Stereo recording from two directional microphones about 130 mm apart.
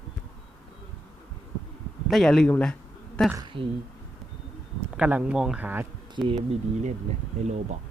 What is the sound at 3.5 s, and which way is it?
Speech, 40° right (ahead or behind).